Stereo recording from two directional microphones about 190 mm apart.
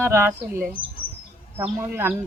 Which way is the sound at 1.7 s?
15° right (ahead or behind).